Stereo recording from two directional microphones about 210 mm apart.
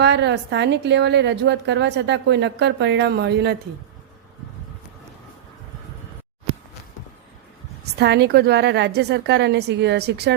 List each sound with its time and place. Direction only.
0.0 s a woman's voice: 55° right (ahead or behind)
7.9 s a woman's voice: 55° right (ahead or behind)